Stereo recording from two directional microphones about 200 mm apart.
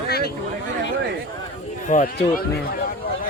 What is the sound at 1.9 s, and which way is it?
Speech, 40° left (ahead or behind).